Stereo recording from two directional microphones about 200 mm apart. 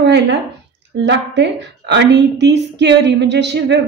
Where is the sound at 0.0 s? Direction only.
60° right (ahead or behind).